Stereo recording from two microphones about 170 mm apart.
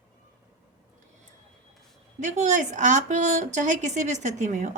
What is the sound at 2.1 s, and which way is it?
Speech, 45° right (ahead or behind).